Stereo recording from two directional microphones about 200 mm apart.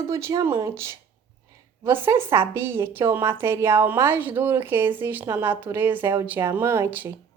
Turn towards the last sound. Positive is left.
turn(degrees=-10)  # may be behind; listen again after turning